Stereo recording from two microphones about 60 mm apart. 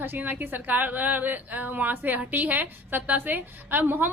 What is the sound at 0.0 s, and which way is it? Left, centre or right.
A woman's voice, right.